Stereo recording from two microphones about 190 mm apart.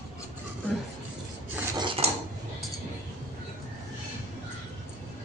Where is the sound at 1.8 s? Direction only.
30° right (ahead or behind).